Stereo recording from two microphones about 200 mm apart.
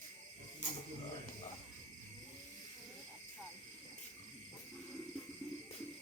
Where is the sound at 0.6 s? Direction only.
40° left (ahead or behind).